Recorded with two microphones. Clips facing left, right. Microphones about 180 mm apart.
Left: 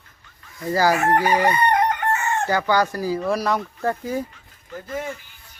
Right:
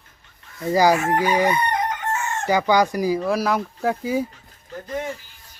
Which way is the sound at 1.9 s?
60° left (ahead or behind).